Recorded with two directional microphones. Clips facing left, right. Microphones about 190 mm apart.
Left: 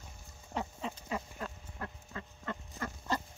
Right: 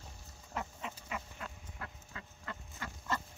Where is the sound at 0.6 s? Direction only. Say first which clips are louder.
Left 4 dB; 30° left (ahead or behind).